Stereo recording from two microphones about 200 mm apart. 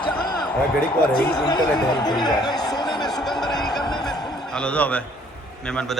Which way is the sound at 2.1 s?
20° left (ahead or behind).